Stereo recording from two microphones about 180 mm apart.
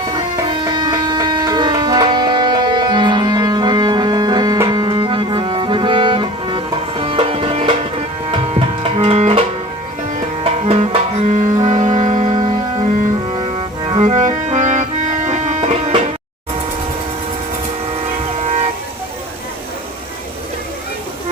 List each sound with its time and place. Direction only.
0.1 s music: 25° right (ahead or behind); by 12.5 s 45° right (ahead or behind)
13.3 s cello: 30° right (ahead or behind)
14.0 s music: 40° right (ahead or behind)
18.3 s vehicle: 35° right (ahead or behind)